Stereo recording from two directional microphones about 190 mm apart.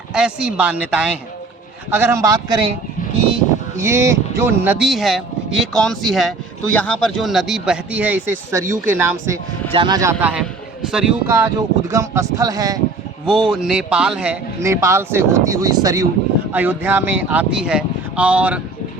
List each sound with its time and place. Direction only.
0.1 s speech: 5° right (ahead or behind); by 2.7 s 25° right (ahead or behind)
3.8 s speech: 15° right (ahead or behind)
9.7 s speech: 25° right (ahead or behind)
13.6 s speech: 5° right (ahead or behind)